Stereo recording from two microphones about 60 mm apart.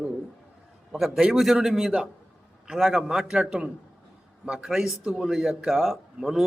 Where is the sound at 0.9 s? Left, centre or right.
Centre.